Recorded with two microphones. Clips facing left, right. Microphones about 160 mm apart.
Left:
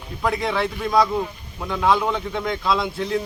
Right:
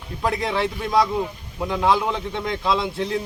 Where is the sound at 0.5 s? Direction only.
20° right (ahead or behind).